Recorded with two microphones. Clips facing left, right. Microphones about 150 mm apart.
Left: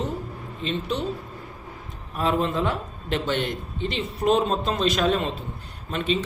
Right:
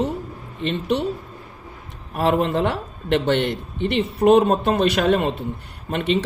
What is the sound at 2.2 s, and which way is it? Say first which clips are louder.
A man's voice: right 4 dB; 65° right (ahead or behind).